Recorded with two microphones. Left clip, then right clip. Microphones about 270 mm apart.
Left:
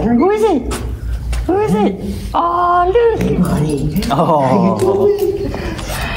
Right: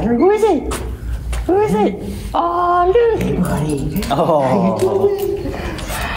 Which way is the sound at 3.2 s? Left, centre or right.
Centre.